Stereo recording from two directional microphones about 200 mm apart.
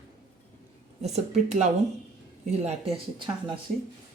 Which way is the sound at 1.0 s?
35° right (ahead or behind).